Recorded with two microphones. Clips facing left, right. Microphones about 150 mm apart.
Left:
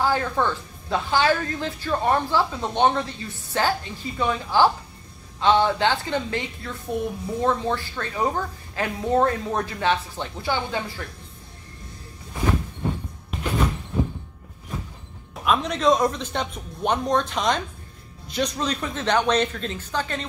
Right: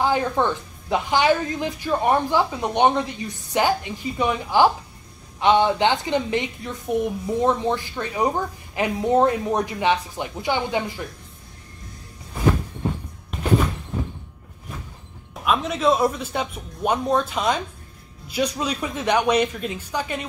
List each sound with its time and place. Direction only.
0.0 s a woman's voice: 15° right (ahead or behind)
15.4 s a woman's voice: centre (ahead or behind)